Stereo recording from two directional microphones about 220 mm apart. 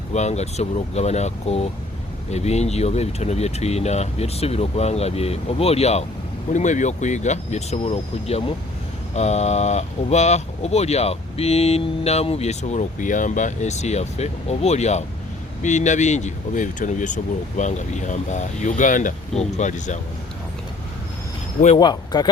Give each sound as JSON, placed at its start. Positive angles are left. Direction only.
{"t": 0.1, "sound": "speech", "side_deg": 30}
{"t": 21.8, "sound": "speech", "side_deg": 20}